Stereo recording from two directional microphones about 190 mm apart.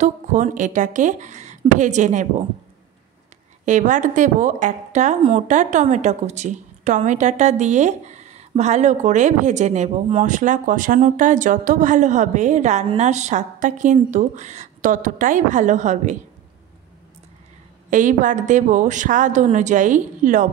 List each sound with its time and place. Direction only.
0.0 s a woman's voice: 40° right (ahead or behind)
3.6 s a woman's voice: 40° right (ahead or behind)
17.8 s a woman's voice: 40° right (ahead or behind)